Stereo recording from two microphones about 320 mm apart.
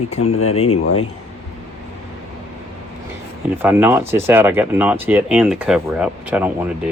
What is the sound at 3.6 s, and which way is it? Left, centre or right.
Speech, centre.